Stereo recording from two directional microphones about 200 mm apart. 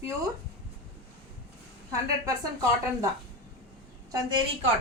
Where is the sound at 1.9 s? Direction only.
15° right (ahead or behind).